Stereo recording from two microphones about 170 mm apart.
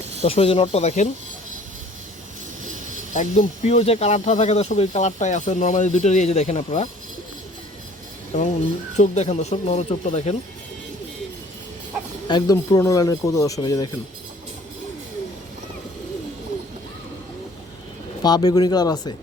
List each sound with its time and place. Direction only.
0.2 s speech: 35° left (ahead or behind)
3.1 s speech: 45° left (ahead or behind)
9.0 s speech: 40° left (ahead or behind)
12.3 s speech: 20° left (ahead or behind)
18.2 s speech: 25° left (ahead or behind)